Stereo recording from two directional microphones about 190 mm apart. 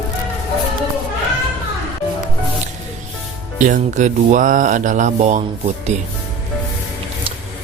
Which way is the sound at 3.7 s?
40° right (ahead or behind).